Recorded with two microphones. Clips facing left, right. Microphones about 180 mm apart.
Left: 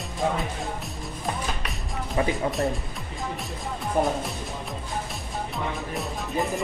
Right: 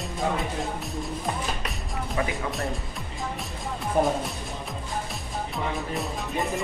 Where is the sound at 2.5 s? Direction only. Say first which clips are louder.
Left 4 dB; centre (ahead or behind).